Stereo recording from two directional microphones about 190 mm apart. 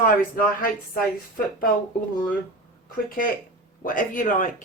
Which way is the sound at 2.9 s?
50° left (ahead or behind).